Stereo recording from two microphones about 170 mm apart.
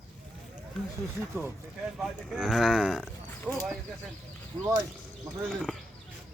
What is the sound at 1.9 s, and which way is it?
Speech, centre (ahead or behind).